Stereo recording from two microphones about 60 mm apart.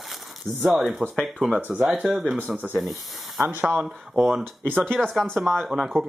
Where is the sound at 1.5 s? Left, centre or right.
Right.